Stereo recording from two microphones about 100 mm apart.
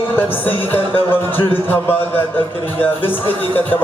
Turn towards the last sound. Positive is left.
turn(degrees=20)  # may be behind; listen again after turning